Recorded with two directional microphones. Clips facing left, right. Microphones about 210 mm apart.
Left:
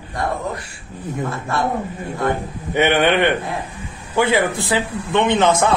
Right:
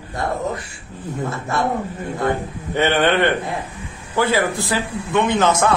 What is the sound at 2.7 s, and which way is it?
A man's voice, 15° left (ahead or behind).